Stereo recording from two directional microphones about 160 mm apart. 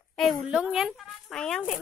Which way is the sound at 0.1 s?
Centre (ahead or behind).